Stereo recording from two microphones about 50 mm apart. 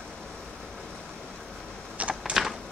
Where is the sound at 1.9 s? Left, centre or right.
Right.